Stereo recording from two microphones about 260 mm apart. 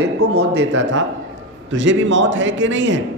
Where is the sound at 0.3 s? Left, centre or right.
Right.